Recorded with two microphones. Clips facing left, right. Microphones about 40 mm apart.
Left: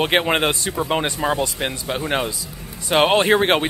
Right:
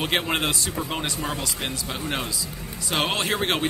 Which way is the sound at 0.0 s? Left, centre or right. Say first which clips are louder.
Left 6 dB; left.